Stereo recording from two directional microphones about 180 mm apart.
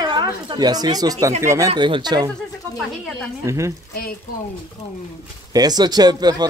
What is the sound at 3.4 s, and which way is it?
Speech, 15° right (ahead or behind).